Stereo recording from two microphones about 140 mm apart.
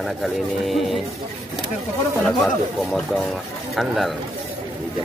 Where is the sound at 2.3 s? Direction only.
5° left (ahead or behind).